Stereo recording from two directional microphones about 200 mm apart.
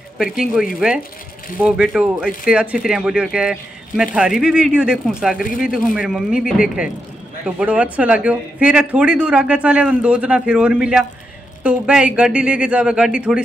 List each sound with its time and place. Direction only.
0.2 s speech: centre (ahead or behind)